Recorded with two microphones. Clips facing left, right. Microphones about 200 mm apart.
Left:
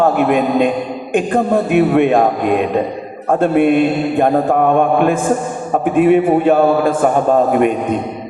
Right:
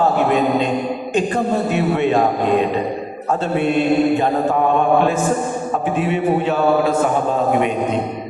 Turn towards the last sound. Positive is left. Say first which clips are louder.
# left 5 dB
turn(degrees=50)  # may be behind; listen again after turning